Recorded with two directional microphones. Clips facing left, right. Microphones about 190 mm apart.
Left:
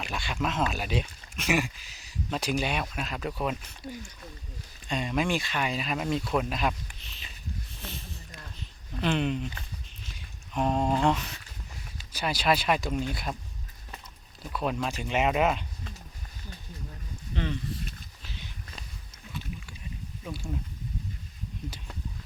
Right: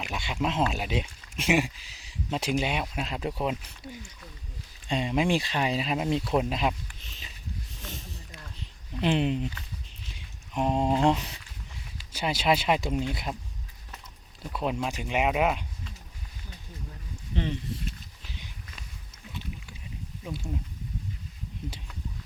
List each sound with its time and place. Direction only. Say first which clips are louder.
0.0 s speech: right 1 dB; 20° right (ahead or behind)
4.9 s speech: right 3 dB; 25° right (ahead or behind)
7.8 s a sound: even; 45° right (ahead or behind)
9.0 s speech: right 2 dB; 30° right (ahead or behind)
10.5 s speech: right 1 dB; 15° right (ahead or behind)
11.0 s speech: right 2 dB; 30° right (ahead or behind)
14.5 s speech: even; 20° right (ahead or behind)
17.3 s speech: right 1 dB; 25° right (ahead or behind)
20.2 s speech: right 1 dB; 20° right (ahead or behind)